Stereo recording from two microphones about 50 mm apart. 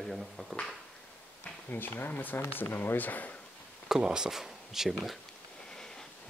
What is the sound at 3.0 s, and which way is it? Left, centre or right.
Speech, left.